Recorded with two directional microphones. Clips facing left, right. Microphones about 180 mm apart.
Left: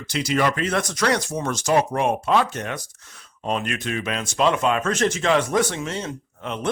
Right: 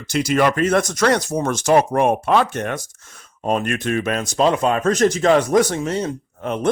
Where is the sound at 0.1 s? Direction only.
45° right (ahead or behind).